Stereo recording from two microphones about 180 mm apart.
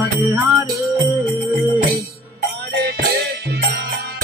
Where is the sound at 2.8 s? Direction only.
60° right (ahead or behind).